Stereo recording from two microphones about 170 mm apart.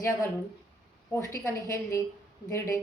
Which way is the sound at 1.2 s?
15° left (ahead or behind).